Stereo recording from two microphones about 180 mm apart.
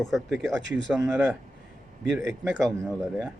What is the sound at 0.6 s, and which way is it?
Speech, 80° right.